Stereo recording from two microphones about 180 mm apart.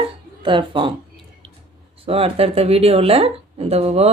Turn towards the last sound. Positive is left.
turn(degrees=-35)  # may be behind; listen again after turning